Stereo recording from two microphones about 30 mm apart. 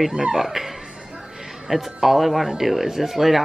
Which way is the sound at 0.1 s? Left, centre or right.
Right.